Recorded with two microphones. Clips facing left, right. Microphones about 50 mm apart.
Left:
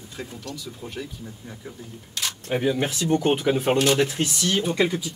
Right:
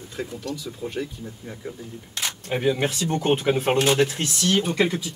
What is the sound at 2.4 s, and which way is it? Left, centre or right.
Speech, right.